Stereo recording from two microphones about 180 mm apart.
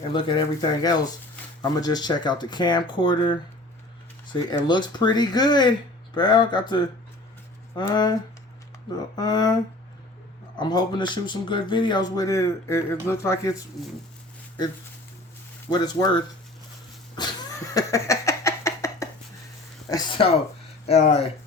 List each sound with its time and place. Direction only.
0.1 s speech: 25° left (ahead or behind)
9.1 s speech: 20° left (ahead or behind)
10.6 s speech: 25° left (ahead or behind)
15.7 s speech: 20° left (ahead or behind)
17.2 s a sound: 25° left (ahead or behind)
19.9 s speech: 25° left (ahead or behind)